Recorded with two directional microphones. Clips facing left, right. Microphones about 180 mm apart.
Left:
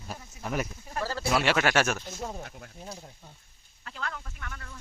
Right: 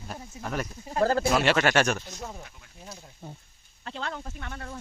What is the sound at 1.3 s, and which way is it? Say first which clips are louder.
Speech: right 2 dB; 10° left (ahead or behind).